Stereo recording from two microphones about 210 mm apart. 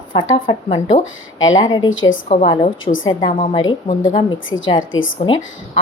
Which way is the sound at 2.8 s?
70° left (ahead or behind).